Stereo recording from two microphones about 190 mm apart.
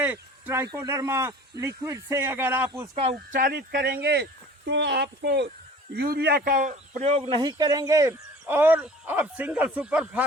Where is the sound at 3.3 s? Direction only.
55° right (ahead or behind); by 7.2 s 40° right (ahead or behind).